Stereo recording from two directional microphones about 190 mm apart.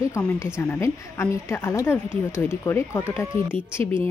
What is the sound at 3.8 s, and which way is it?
Speech, 30° right (ahead or behind).